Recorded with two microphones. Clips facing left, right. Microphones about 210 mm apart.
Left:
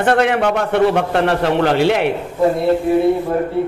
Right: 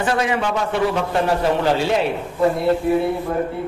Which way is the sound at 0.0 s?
60° left (ahead or behind).